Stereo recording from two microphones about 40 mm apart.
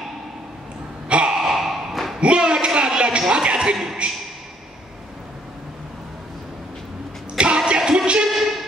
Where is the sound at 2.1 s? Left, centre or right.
Right.